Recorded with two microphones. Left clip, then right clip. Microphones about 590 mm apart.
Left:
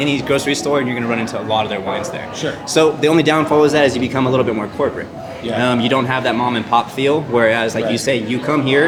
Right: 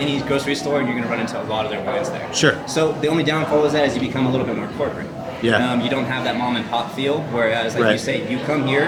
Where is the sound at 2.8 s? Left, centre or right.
Left.